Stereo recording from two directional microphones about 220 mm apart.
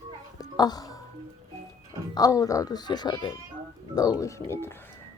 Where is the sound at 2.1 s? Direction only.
15° left (ahead or behind).